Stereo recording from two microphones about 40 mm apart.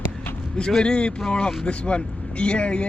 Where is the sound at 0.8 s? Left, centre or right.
Left.